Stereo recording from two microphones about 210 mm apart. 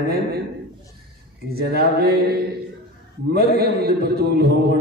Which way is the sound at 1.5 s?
50° right (ahead or behind).